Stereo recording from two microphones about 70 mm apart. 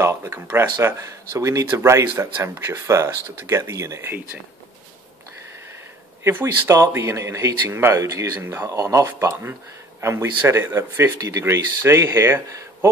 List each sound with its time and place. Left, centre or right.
0.0 s a sound: right
0.3 s speech: right
0.9 s speech: right
4.0 s speech: right
6.4 s speech: right
8.4 s speech: right
8.6 s speech: right
9.2 s speech: right
11.1 s speech: right